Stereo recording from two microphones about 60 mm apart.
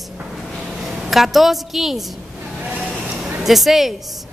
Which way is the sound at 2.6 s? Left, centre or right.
Right.